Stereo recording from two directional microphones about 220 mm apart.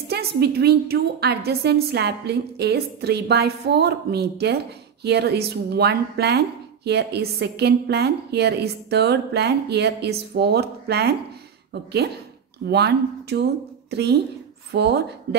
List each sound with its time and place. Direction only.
0.1 s speech: 45° right (ahead or behind)